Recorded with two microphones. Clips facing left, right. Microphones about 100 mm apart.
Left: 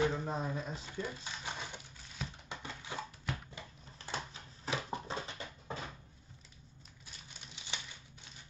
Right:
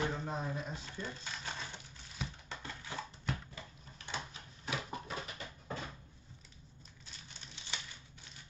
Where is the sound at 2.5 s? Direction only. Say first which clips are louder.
Left 3 dB; 15° left (ahead or behind).